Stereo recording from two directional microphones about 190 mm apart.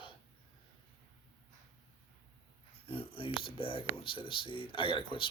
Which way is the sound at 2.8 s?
30° left (ahead or behind).